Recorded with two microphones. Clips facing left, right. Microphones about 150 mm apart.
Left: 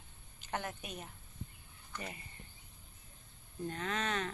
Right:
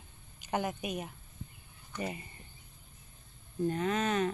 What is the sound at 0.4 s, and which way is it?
A woman's voice, 15° right (ahead or behind).